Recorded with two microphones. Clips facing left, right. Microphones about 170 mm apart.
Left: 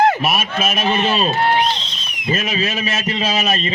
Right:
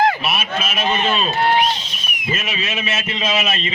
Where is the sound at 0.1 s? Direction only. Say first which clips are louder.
Left 3 dB; 45° left (ahead or behind).